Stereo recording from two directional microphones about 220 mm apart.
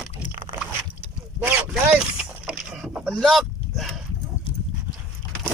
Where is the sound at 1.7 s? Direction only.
5° right (ahead or behind).